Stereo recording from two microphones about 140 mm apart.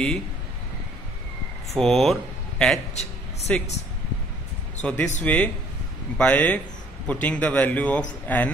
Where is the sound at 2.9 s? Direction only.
50° left (ahead or behind).